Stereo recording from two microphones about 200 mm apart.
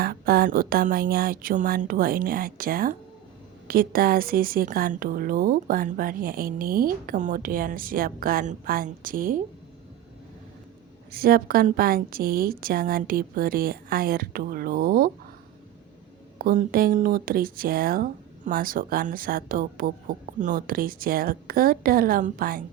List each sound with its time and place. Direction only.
0.0 s speech: 50° right (ahead or behind)
11.1 s speech: 45° right (ahead or behind)
16.4 s speech: 45° right (ahead or behind)